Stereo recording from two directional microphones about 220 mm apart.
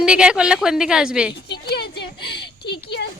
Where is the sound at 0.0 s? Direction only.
5° right (ahead or behind).